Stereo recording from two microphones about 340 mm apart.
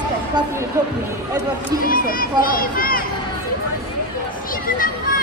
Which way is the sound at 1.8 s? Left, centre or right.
Left.